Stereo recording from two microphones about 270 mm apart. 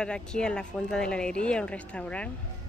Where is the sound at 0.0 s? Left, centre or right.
Centre.